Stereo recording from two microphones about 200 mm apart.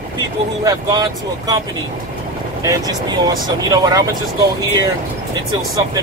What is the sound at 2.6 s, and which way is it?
Speech, 20° right (ahead or behind).